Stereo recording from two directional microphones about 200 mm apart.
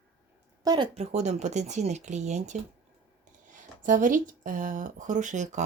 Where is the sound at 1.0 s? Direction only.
35° right (ahead or behind).